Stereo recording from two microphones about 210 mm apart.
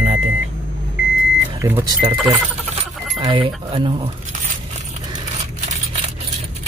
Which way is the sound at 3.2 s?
25° right (ahead or behind).